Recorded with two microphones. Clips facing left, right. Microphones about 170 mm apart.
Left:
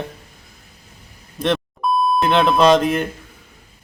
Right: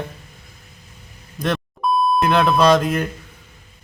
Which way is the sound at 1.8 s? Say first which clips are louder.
Right 4 dB; centre (ahead or behind).